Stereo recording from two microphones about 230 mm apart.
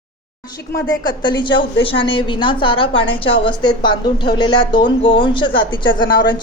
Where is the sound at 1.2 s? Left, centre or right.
Centre.